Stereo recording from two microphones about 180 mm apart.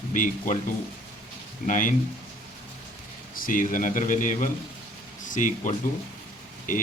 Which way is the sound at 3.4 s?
50° left (ahead or behind).